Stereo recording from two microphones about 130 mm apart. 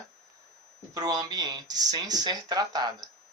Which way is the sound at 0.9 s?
30° right (ahead or behind).